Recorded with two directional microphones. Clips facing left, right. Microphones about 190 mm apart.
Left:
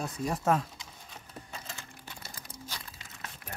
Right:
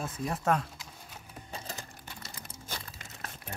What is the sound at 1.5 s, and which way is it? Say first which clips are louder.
Typing: right 5 dB; 40° right (ahead or behind).